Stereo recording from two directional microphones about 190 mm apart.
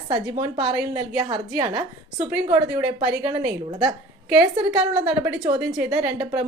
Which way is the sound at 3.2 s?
20° right (ahead or behind).